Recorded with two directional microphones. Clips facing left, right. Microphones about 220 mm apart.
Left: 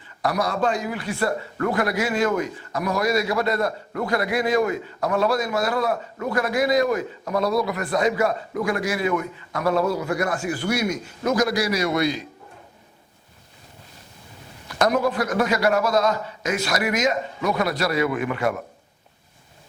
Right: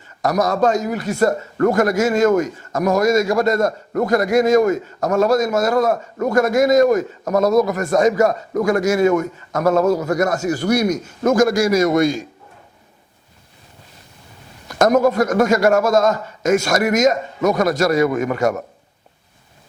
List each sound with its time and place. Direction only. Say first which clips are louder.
0.2 s a man's voice: right 6 dB; 45° right (ahead or behind)
14.7 s a man's voice: right 6 dB; 45° right (ahead or behind)